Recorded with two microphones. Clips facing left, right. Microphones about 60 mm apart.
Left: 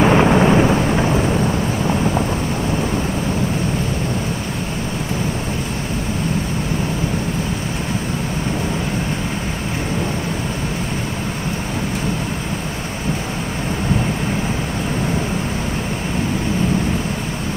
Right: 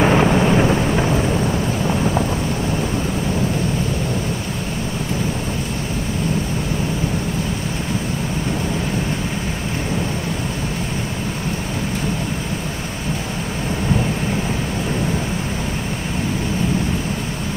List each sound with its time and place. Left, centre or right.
0.0 s thunder: centre
0.3 s thunder: centre
0.6 s thunder: centre